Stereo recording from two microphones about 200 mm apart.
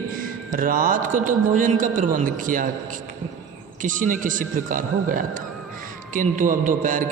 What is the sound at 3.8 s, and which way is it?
A man's voice, 40° right (ahead or behind).